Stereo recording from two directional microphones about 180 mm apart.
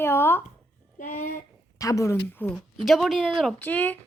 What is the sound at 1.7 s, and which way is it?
Speech, 20° left (ahead or behind).